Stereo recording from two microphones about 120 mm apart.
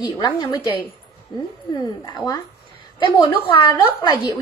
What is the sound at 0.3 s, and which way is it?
Speech, 30° left (ahead or behind).